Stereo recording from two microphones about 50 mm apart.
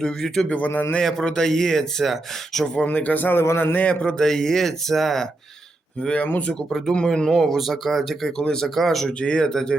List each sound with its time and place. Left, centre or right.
0.0 s speech: centre
0.4 s speech: left
0.7 s a man's voice: left
1.2 s speech: centre
2.7 s speech: left
3.4 s a man's voice: left
3.8 s a man's voice: left
4.2 s speech: centre
6.0 s a man's voice: centre
7.3 s speech: centre
8.4 s speech: centre
8.7 s speech: centre